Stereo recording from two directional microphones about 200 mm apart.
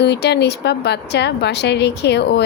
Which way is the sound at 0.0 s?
55° left (ahead or behind).